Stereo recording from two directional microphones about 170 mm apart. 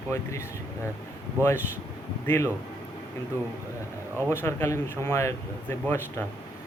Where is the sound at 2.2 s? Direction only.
15° left (ahead or behind).